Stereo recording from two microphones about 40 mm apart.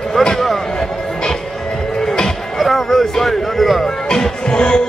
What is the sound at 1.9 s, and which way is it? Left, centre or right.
Music, centre.